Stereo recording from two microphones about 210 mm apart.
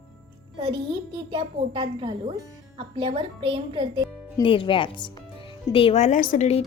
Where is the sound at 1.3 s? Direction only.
25° right (ahead or behind).